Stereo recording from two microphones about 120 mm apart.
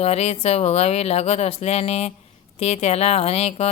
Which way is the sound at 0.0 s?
60° left (ahead or behind).